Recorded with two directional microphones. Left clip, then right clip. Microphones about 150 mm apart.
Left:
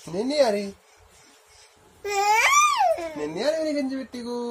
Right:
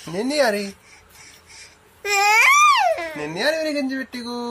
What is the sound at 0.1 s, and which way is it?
Speech, 20° right (ahead or behind).